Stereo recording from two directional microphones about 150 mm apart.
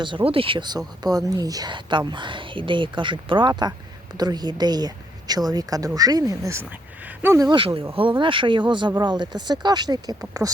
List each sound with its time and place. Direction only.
0.3 s speech: 35° right (ahead or behind)